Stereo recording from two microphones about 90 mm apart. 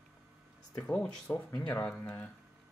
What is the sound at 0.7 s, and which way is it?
Speech, 10° left (ahead or behind).